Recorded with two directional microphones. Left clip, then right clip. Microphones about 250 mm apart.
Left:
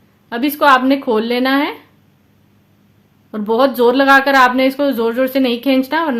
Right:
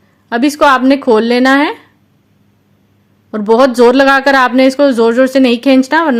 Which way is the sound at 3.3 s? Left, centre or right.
Right.